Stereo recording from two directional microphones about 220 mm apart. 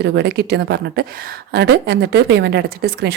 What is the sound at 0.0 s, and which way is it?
Speech, 50° right (ahead or behind).